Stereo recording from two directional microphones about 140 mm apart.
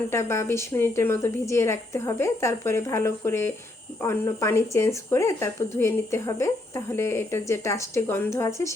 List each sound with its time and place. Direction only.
0.1 s a woman's voice: 20° left (ahead or behind)